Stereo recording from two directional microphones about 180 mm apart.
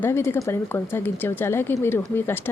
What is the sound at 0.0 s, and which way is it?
Speech, 10° left (ahead or behind).